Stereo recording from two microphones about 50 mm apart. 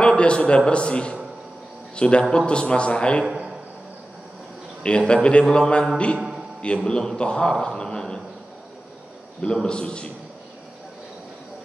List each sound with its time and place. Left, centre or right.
0.0 s a man's voice: centre
4.8 s a man's voice: left
9.4 s a man's voice: centre